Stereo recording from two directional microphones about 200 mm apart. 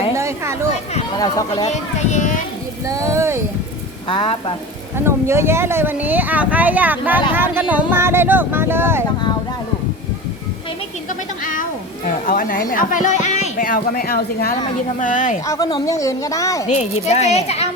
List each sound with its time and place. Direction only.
0.1 s a sound: 15° right (ahead or behind)
1.2 s speech: 20° left (ahead or behind)
1.7 s a woman's voice: 35° left (ahead or behind)
2.8 s speech: 15° right (ahead or behind)
4.1 s speech: 25° left (ahead or behind)
5.0 s speech: 10° right (ahead or behind)
12.0 s a woman's voice: 45° left (ahead or behind)
14.9 s a woman's voice: 40° left (ahead or behind)
15.4 s speech: 20° left (ahead or behind)
16.6 s a woman's voice: 35° left (ahead or behind)